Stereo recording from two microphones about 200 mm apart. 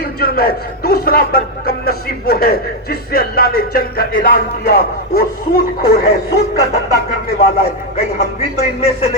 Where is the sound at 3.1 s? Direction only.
50° left (ahead or behind).